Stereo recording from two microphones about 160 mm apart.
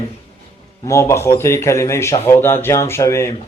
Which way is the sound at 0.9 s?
15° left (ahead or behind).